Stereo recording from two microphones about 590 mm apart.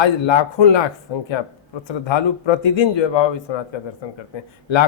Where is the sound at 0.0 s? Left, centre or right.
Left.